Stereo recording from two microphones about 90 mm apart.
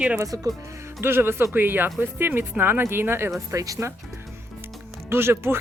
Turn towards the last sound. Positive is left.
turn(degrees=-25)  # may be behind; listen again after turning